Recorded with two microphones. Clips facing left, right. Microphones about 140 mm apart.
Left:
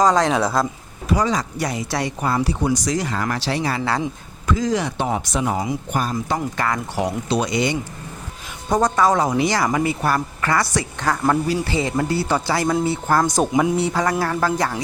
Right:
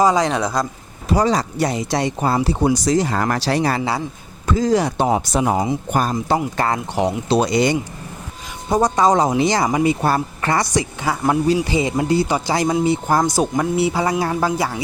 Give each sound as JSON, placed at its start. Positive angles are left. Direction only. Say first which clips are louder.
{"t": 0.0, "sound": "speech", "louder": "even", "side_deg": -5}
{"t": 1.0, "sound": "speech", "louder": "right 3 dB", "side_deg": -35}
{"t": 3.2, "sound": "speech", "louder": "right 4 dB", "side_deg": -45}
{"t": 8.7, "sound": "speech", "louder": "right 2 dB", "side_deg": -15}
{"t": 13.4, "sound": "speech", "louder": "left 1 dB", "side_deg": 0}
{"t": 13.7, "sound": "speech", "louder": "right 2 dB", "side_deg": -10}